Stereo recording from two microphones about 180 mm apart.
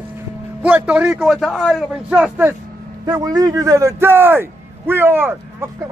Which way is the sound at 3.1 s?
20° right (ahead or behind).